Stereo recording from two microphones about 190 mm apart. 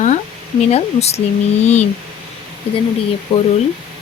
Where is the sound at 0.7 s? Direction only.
35° left (ahead or behind).